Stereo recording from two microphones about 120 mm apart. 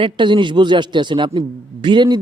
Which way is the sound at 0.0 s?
40° right (ahead or behind).